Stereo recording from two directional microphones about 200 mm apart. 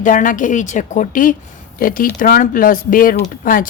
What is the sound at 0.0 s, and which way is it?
A woman's voice, 40° left (ahead or behind).